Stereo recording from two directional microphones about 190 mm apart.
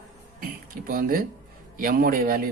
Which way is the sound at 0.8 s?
50° right (ahead or behind).